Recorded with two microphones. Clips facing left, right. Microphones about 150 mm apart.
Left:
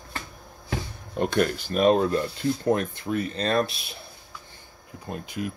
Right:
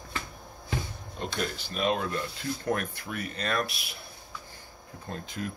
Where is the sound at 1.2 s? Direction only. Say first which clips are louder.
Left 10 dB; 55° left (ahead or behind).